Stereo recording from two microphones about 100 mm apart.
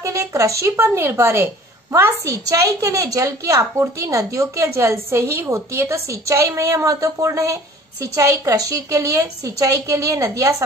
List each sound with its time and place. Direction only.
0.0 s a woman's voice: 30° right (ahead or behind)